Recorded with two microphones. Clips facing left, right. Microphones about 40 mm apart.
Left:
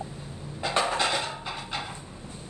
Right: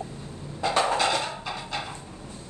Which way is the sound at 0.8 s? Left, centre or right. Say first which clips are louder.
Right 2 dB; centre.